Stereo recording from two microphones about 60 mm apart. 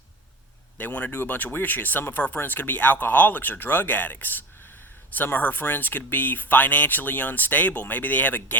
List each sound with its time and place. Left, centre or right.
0.8 s speech: left